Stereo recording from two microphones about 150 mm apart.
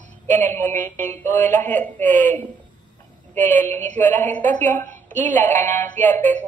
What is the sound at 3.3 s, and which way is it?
A woman's voice, 15° left (ahead or behind).